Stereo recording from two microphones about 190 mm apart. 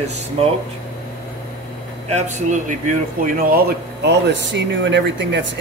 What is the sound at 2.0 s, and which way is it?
Speech, 35° right (ahead or behind).